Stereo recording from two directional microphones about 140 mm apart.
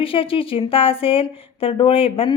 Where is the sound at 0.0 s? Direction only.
40° left (ahead or behind).